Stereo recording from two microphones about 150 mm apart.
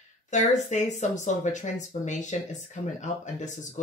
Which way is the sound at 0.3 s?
50° left (ahead or behind).